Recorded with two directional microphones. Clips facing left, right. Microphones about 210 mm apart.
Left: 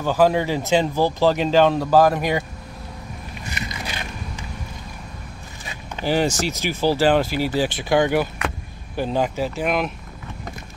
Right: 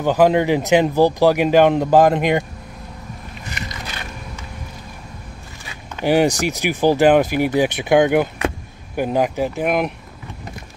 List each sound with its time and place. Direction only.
0.0 s speech: 20° right (ahead or behind)
6.0 s speech: 15° right (ahead or behind)